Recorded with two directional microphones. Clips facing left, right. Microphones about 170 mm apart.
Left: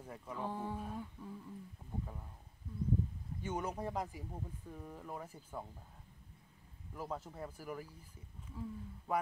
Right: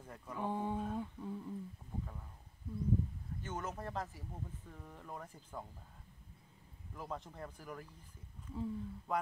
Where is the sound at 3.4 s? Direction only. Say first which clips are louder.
Left 4 dB; 10° left (ahead or behind).